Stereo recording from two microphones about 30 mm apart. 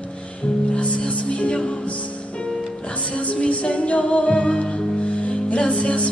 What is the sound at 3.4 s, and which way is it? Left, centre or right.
Music, left.